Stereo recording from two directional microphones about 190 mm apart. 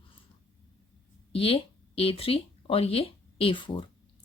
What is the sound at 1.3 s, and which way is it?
Speech, 30° left (ahead or behind).